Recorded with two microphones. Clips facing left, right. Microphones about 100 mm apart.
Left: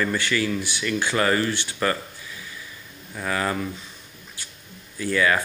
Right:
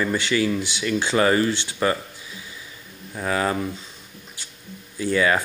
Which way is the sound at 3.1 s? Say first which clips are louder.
Right 3 dB; 25° right (ahead or behind).